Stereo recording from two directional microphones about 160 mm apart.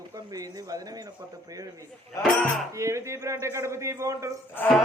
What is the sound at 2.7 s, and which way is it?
A man's voice, 20° right (ahead or behind).